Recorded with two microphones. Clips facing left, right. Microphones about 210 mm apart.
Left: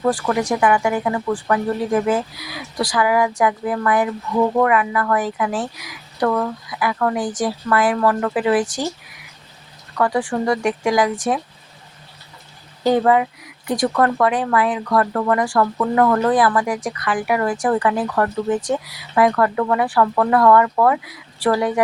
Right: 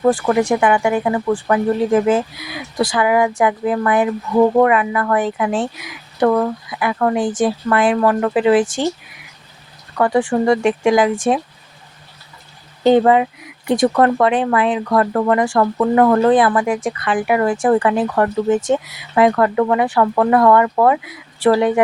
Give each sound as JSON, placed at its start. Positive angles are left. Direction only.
{"t": 0.0, "sound": "speech", "side_deg": -25}
{"t": 10.0, "sound": "speech", "side_deg": -25}
{"t": 12.8, "sound": "speech", "side_deg": -25}